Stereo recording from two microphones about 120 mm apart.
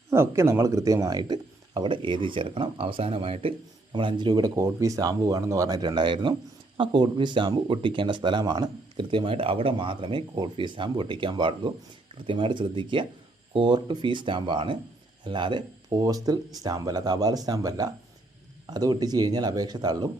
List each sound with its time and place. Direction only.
0.1 s speech: 20° right (ahead or behind)